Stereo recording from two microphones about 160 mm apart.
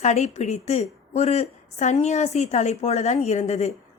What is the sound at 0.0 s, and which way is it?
A woman's voice, 45° left (ahead or behind).